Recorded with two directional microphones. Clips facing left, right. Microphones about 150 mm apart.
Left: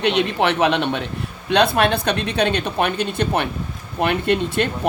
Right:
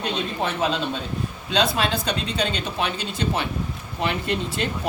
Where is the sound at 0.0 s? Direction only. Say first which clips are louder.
Left 7 dB; 75° left (ahead or behind).